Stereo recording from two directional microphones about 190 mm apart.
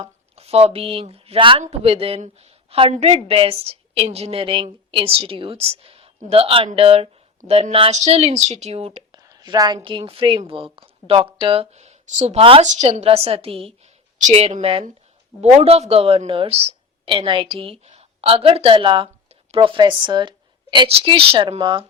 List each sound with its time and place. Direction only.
0.0 s a woman's voice: 30° right (ahead or behind)
9.2 s a woman's voice: 20° right (ahead or behind)